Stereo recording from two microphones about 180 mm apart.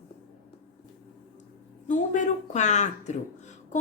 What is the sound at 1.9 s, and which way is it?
A woman's voice, 45° left (ahead or behind).